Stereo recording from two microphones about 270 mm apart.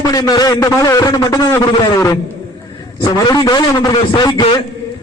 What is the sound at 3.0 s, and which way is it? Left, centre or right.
A man's voice, centre.